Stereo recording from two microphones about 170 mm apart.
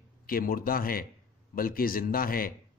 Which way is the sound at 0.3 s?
60° left (ahead or behind).